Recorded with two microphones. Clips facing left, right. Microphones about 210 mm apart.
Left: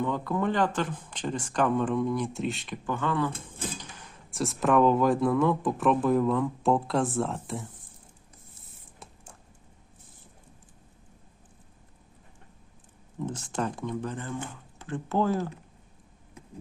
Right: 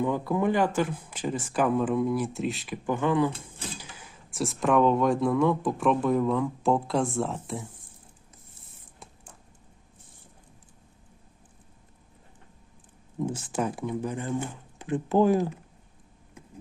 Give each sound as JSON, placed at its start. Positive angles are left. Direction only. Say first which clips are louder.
{"t": 0.0, "sound": "speech", "louder": "right 2 dB", "side_deg": -10}
{"t": 2.8, "sound": "speech", "louder": "right 4 dB", "side_deg": -15}
{"t": 3.8, "sound": "speech", "louder": "left 1 dB", "side_deg": -5}
{"t": 13.1, "sound": "speech", "louder": "right 3 dB", "side_deg": -10}